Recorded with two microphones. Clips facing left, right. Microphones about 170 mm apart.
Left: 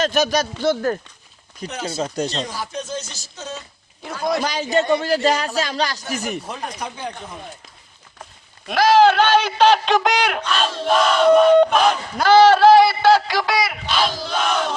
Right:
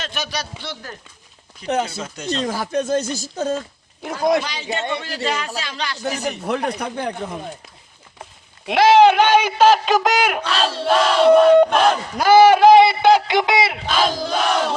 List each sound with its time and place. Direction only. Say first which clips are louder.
0.0 s speech: left 10 dB; 45° left (ahead or behind)
2.5 s speech: right 8 dB; 50° right (ahead or behind)
4.4 s speech: left 7 dB; 45° left (ahead or behind)
6.4 s speech: right 7 dB; 65° right (ahead or behind)
8.6 s speech: right 2 dB; 25° right (ahead or behind); by 10.4 s 5° right (ahead or behind)
10.4 s battle cry: right 1 dB; 30° right (ahead or behind)
11.3 s speech: right 1 dB; 5° right (ahead or behind); by 13.8 s 25° right (ahead or behind)
13.8 s speech: right 2 dB; 45° right (ahead or behind)